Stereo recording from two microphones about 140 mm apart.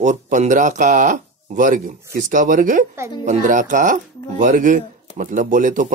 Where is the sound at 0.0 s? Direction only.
60° right (ahead or behind).